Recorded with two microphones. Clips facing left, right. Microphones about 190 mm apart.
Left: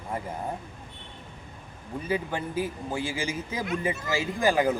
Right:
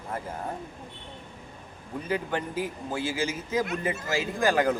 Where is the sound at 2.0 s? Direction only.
10° left (ahead or behind).